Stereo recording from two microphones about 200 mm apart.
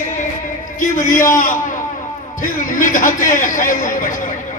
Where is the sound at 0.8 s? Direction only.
40° left (ahead or behind).